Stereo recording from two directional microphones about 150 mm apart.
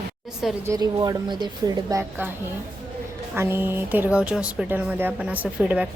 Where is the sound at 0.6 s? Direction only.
25° right (ahead or behind).